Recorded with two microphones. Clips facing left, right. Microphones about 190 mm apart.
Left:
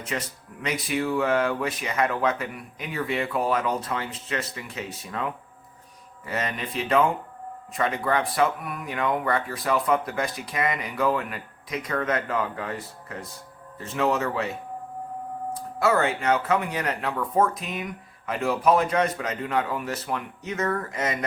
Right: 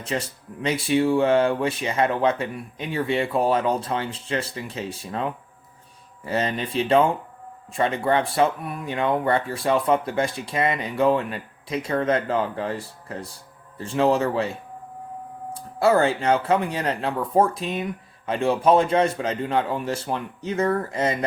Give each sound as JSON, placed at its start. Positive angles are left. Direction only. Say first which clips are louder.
{"t": 0.0, "sound": "speech", "louder": "right 4 dB", "side_deg": -30}
{"t": 15.8, "sound": "speech", "louder": "right 4 dB", "side_deg": -30}